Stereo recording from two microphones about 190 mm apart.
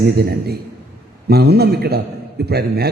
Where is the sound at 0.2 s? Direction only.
55° right (ahead or behind).